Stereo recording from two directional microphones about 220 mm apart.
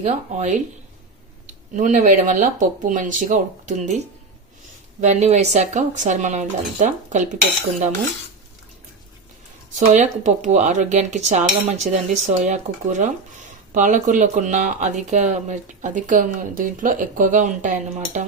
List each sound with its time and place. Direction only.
0.0 s speech: 30° right (ahead or behind)
9.7 s speech: 35° right (ahead or behind)